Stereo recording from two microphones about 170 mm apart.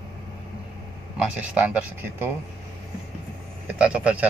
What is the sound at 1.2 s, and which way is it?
Speech, 10° right (ahead or behind).